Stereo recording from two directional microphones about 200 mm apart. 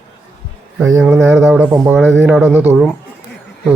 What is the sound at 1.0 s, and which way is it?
Speech, 5° right (ahead or behind).